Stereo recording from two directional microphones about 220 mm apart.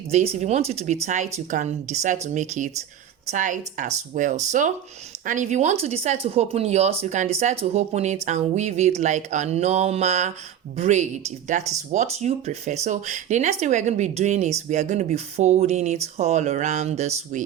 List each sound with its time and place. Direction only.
0.1 s speech: 30° right (ahead or behind)